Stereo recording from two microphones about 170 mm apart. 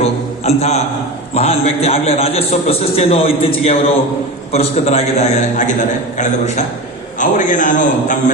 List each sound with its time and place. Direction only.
0.0 s music: 40° left (ahead or behind)
1.3 s a man's voice: 40° left (ahead or behind)